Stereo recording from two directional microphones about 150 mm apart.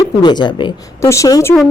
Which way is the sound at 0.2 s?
30° left (ahead or behind).